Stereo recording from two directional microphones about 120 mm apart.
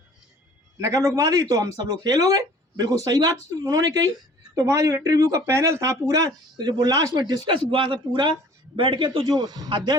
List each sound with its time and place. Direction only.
0.8 s a man's voice: 25° right (ahead or behind)